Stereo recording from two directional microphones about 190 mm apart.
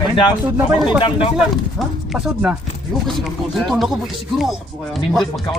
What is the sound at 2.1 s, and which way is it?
Speech, 5° right (ahead or behind).